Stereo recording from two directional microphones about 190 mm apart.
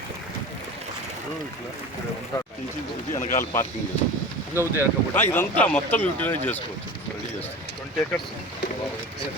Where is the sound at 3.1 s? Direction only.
40° left (ahead or behind).